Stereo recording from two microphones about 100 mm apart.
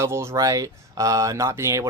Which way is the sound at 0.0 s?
25° right (ahead or behind).